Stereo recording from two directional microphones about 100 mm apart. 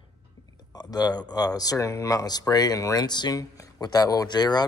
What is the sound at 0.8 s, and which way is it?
Speech, 45° left (ahead or behind).